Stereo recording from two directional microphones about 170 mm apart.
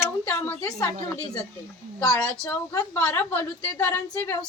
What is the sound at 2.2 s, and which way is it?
A woman's voice, 5° left (ahead or behind).